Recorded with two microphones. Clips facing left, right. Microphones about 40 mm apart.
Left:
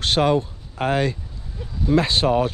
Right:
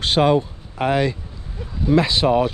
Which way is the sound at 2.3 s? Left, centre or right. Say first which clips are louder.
Right 2 dB; right.